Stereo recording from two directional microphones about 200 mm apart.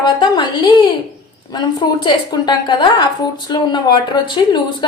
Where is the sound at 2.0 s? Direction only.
20° left (ahead or behind).